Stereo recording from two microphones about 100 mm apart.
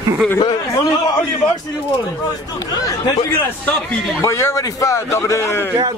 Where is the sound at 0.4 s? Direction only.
40° left (ahead or behind).